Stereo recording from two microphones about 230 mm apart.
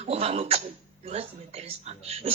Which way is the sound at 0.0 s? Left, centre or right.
Right.